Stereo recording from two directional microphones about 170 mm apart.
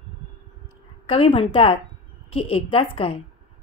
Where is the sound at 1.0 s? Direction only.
30° left (ahead or behind).